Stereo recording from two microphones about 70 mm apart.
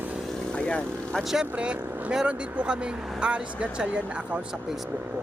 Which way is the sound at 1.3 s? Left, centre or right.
Centre.